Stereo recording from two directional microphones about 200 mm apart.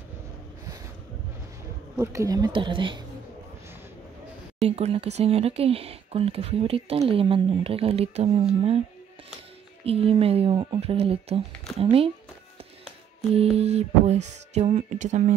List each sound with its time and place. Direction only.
2.0 s speech: 15° right (ahead or behind)
4.6 s speech: 30° right (ahead or behind)
9.8 s speech: 30° right (ahead or behind)
13.3 s a sound: 30° right (ahead or behind)